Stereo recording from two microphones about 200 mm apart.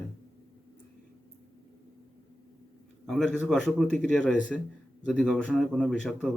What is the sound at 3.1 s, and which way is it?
Speech, centre (ahead or behind).